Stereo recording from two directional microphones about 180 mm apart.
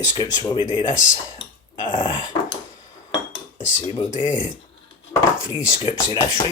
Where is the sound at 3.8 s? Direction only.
25° left (ahead or behind).